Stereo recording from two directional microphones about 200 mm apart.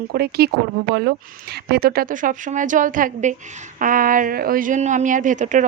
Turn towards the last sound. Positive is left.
turn(degrees=-40)  # may be behind; listen again after turning